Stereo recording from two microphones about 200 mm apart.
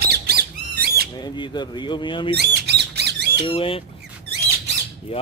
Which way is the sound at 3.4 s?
25° left (ahead or behind).